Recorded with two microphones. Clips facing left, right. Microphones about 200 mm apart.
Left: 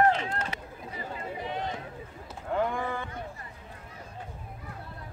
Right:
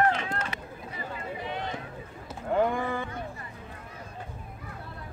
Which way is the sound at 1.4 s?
40° left (ahead or behind).